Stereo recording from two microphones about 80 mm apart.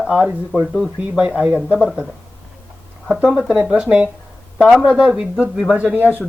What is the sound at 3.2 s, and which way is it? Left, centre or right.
Speech, centre.